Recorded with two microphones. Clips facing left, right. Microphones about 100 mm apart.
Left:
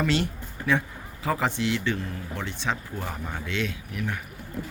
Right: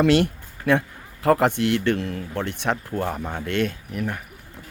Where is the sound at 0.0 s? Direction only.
65° right (ahead or behind); by 4.2 s 45° right (ahead or behind).